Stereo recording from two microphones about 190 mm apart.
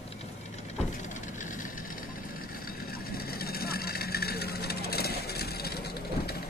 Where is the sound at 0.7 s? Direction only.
40° left (ahead or behind).